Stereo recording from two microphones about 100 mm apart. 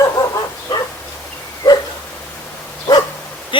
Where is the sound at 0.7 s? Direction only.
45° left (ahead or behind).